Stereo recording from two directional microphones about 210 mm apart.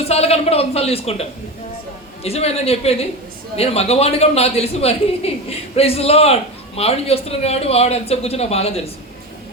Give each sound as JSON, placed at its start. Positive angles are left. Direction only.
{"t": 0.0, "sound": "a man's voice", "side_deg": 30}
{"t": 2.2, "sound": "a man's voice", "side_deg": 30}